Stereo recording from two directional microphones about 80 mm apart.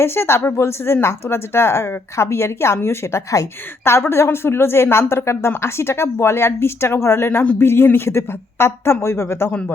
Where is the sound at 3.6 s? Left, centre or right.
Left.